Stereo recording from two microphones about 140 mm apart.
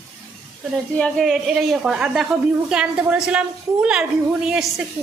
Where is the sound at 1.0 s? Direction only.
5° left (ahead or behind).